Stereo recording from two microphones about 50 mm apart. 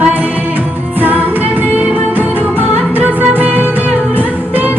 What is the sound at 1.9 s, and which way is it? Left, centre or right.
Music, right.